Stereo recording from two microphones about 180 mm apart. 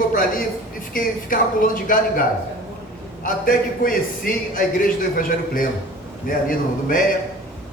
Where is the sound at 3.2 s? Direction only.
50° left (ahead or behind).